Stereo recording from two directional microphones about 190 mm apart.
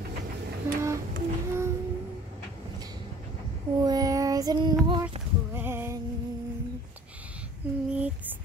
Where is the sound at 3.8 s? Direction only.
20° right (ahead or behind).